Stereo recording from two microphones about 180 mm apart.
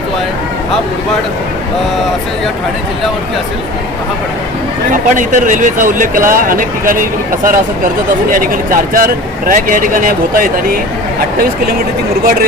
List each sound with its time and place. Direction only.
4.9 s speech: 45° right (ahead or behind)